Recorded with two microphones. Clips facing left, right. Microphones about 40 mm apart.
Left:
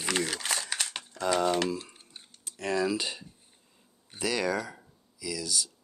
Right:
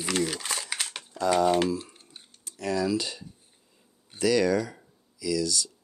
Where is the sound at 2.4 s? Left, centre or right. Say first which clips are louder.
Right 1 dB; left.